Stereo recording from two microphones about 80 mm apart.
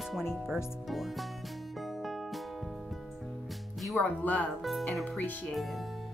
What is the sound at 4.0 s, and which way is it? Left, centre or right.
Speech, left.